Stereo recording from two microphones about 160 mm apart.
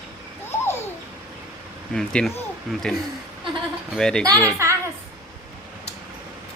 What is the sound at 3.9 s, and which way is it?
Speech, 5° left (ahead or behind).